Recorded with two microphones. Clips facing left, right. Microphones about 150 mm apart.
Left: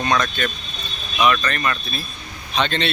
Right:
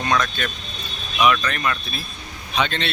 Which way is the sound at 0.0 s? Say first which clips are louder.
Left 1 dB; centre (ahead or behind).